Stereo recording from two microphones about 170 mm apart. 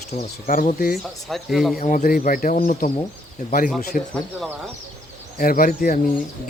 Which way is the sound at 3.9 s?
50° left (ahead or behind).